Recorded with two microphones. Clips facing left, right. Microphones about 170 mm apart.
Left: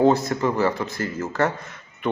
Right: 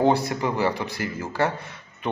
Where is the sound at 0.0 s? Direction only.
15° right (ahead or behind).